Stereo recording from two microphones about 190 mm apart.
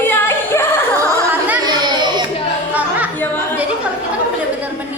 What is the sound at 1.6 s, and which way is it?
Chatter, 20° right (ahead or behind).